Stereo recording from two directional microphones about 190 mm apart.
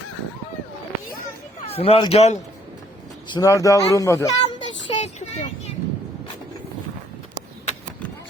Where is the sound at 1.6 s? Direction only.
30° left (ahead or behind).